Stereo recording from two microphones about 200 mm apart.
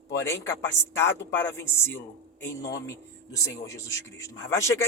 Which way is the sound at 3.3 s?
15° left (ahead or behind).